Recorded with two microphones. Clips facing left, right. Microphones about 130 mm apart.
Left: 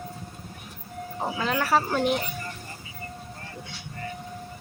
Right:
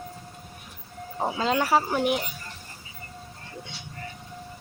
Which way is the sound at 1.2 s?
20° right (ahead or behind).